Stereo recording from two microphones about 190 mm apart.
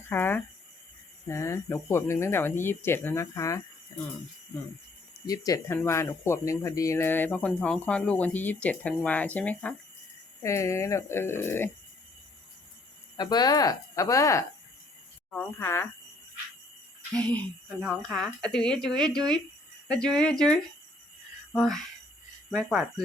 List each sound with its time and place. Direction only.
0.1 s speech: 10° left (ahead or behind)
5.2 s speech: 20° left (ahead or behind)
13.1 s speech: 20° left (ahead or behind)
17.2 s speech: 5° left (ahead or behind)